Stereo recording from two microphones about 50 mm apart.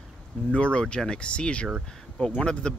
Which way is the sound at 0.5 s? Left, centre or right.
Centre.